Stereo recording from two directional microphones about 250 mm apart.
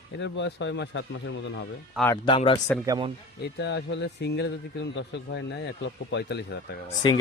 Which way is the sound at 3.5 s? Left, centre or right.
Left.